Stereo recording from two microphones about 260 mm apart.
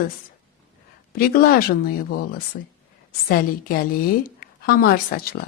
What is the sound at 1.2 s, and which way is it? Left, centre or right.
A woman's voice, left.